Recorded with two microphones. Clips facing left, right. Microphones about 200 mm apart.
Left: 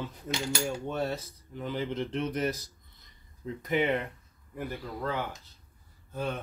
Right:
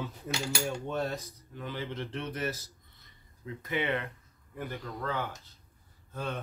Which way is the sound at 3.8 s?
15° left (ahead or behind).